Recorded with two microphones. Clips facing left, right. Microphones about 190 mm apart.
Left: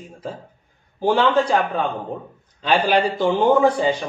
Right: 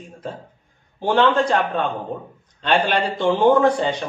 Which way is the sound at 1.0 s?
5° left (ahead or behind).